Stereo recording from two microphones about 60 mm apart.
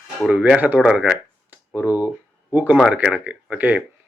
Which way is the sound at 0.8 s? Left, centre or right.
Centre.